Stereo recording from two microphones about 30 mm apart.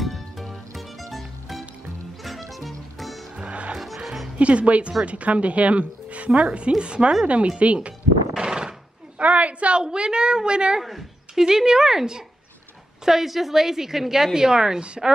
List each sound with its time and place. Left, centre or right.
0.0 s music: centre
2.2 s music: centre
3.3 s music: right
4.4 s a woman's voice: right
7.2 s speech: right
8.4 s a sound: right
9.2 s a sound: right
9.8 s a woman's voice: right
10.8 s a woman's voice: centre
11.3 s a woman's voice: centre